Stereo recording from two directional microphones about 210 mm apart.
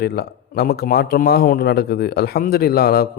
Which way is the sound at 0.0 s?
50° left (ahead or behind).